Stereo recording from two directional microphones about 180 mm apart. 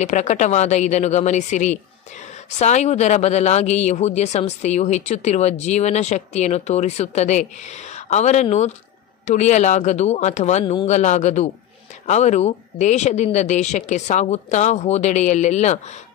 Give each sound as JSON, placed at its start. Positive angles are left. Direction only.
{"t": 0.0, "sound": "speech", "side_deg": 40}
{"t": 10.6, "sound": "speech", "side_deg": 25}
{"t": 10.9, "sound": "speech", "side_deg": 40}